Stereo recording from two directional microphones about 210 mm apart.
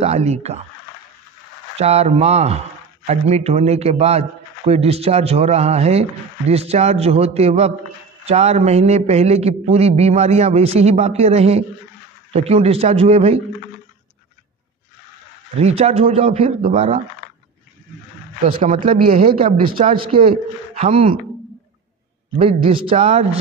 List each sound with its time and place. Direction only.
0.0 s a man's voice: 30° right (ahead or behind)
1.8 s a man's voice: 30° right (ahead or behind)
15.6 s a man's voice: 30° right (ahead or behind)
18.4 s a man's voice: 30° right (ahead or behind)
19.3 s a man's voice: 25° right (ahead or behind)
22.4 s a man's voice: 25° right (ahead or behind)